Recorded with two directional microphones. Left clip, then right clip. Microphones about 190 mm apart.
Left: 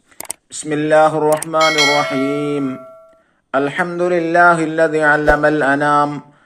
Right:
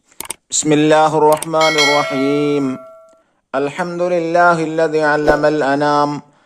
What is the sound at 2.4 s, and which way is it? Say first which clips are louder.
Speech: right 3 dB; 45° right (ahead or behind).